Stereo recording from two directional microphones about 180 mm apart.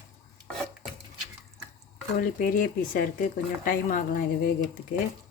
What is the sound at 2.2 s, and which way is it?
Speech, 50° left (ahead or behind).